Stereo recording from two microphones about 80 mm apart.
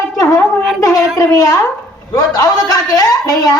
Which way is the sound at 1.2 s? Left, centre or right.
Left.